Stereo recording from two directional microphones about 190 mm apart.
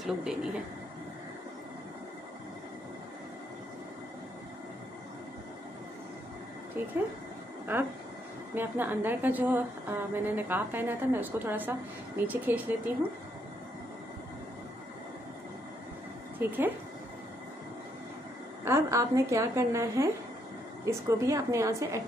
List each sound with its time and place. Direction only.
0.0 s speech: 5° right (ahead or behind)
7.7 s a woman's voice: 10° right (ahead or behind)
16.3 s speech: 10° right (ahead or behind)
18.6 s a woman's voice: 15° right (ahead or behind)